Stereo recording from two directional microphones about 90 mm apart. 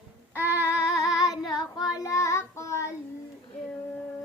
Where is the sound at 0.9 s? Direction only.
40° left (ahead or behind).